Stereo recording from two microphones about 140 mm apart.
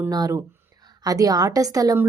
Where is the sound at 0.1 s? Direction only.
25° right (ahead or behind).